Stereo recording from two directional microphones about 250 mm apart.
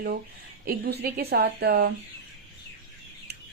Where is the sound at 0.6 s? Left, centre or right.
Right.